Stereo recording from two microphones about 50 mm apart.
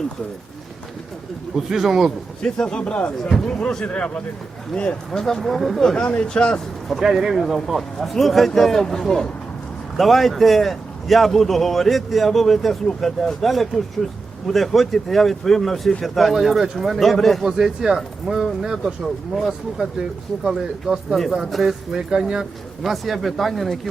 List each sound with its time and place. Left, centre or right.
1.5 s speech: centre
2.4 s a man's voice: centre
5.2 s a man's voice: centre
6.0 s speech: left
7.0 s a man's voice: centre
17.6 s a man's voice: centre